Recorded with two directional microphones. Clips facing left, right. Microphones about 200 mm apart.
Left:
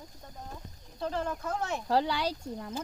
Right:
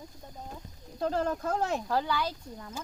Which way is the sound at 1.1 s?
40° right (ahead or behind).